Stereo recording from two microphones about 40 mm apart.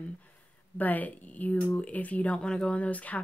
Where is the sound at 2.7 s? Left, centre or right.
Left.